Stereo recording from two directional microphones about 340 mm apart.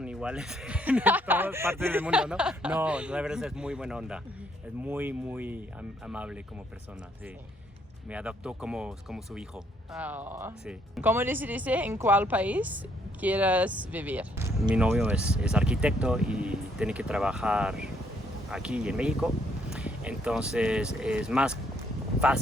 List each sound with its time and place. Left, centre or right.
0.0 s speech: centre
8.1 s speech: centre